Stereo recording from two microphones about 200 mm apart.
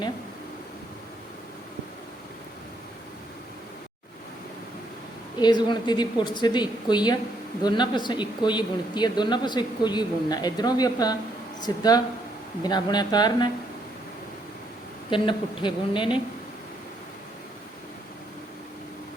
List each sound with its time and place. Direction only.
5.4 s speech: 20° left (ahead or behind)
15.1 s speech: 25° left (ahead or behind)